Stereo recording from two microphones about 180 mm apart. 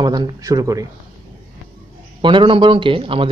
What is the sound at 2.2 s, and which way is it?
Speech, 25° right (ahead or behind).